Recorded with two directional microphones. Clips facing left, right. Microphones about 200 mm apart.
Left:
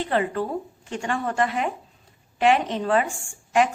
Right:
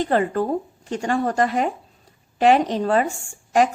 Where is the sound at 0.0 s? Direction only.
45° right (ahead or behind).